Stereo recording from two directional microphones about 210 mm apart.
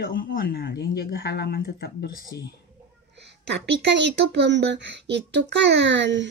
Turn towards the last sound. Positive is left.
turn(degrees=-60)  # may be behind; listen again after turning